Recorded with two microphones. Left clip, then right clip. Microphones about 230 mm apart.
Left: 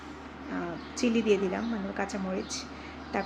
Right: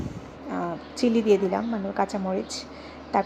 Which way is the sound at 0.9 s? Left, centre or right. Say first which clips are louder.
Right 5 dB; centre.